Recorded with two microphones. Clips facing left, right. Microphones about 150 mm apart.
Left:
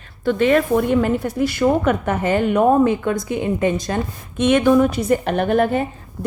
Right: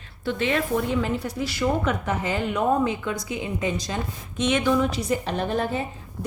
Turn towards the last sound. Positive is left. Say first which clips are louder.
# left 8 dB
turn(degrees=60)  # may be behind; listen again after turning